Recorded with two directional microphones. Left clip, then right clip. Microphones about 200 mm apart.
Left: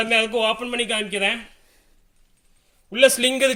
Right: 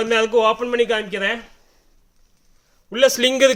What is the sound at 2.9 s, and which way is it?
Speech, 35° right (ahead or behind).